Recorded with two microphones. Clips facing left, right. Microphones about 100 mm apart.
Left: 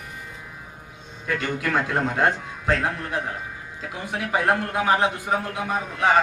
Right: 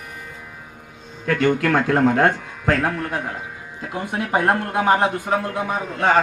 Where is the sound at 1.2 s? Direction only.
55° right (ahead or behind).